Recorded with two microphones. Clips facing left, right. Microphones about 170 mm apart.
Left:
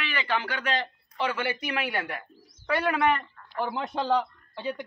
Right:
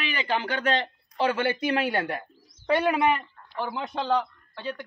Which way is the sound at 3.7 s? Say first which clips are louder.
Even; centre (ahead or behind).